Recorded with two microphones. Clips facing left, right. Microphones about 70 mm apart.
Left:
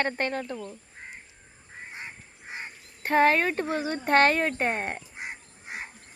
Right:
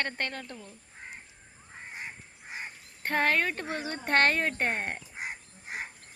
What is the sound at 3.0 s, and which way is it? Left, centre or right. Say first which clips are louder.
Speech: left 5 dB; centre.